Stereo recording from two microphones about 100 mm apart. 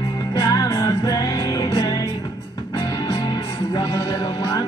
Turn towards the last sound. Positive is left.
turn(degrees=45)  # may be behind; listen again after turning